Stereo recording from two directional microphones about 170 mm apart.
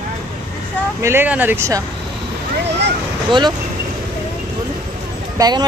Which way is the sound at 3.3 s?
25° right (ahead or behind).